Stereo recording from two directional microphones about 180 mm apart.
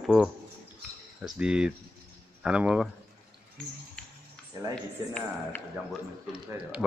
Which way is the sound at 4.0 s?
5° left (ahead or behind).